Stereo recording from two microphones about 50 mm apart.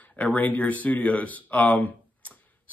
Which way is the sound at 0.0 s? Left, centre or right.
Left.